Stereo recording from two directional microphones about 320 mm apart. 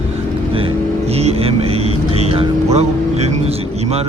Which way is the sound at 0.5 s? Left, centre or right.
Centre.